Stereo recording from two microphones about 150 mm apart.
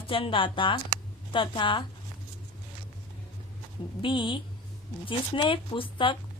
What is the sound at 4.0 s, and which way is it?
Speech, 35° left (ahead or behind).